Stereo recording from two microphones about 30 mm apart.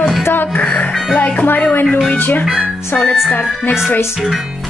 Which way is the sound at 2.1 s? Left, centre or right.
Left.